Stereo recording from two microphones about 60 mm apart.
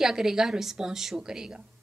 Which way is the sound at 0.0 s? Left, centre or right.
Centre.